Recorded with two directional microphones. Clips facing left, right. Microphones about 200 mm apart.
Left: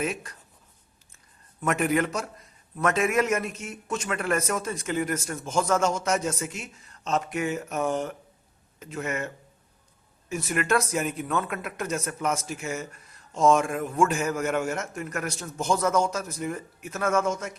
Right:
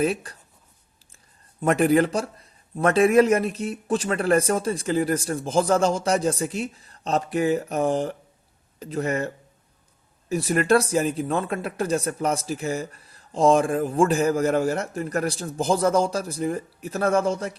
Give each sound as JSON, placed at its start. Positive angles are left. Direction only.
{"t": 0.0, "sound": "speech", "side_deg": -35}
{"t": 1.6, "sound": "speech", "side_deg": -35}